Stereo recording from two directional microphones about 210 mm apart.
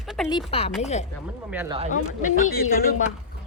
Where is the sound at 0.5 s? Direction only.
30° left (ahead or behind).